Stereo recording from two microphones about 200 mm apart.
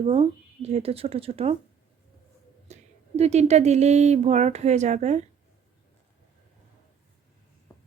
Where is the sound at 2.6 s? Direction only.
35° right (ahead or behind).